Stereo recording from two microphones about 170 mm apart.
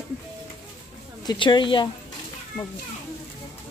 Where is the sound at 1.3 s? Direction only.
25° left (ahead or behind).